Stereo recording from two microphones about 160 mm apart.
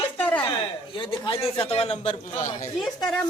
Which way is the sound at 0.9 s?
30° left (ahead or behind).